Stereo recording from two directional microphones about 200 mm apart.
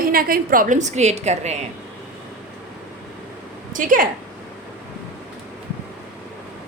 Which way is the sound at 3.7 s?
40° right (ahead or behind).